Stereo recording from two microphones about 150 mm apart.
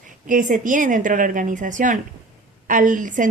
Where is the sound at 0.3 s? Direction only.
60° right (ahead or behind).